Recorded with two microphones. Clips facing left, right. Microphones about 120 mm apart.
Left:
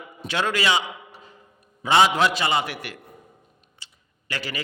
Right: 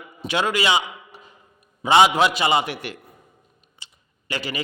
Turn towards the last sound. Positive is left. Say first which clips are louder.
# right 3 dB
turn(degrees=-15)  # may be behind; listen again after turning